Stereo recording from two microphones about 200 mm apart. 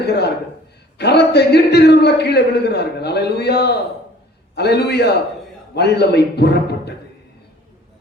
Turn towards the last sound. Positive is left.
turn(degrees=55)  # may be behind; listen again after turning